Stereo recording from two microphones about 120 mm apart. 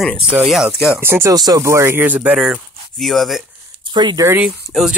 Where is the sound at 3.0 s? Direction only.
Centre (ahead or behind).